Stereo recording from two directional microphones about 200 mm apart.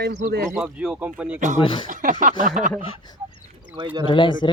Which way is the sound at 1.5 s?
25° left (ahead or behind).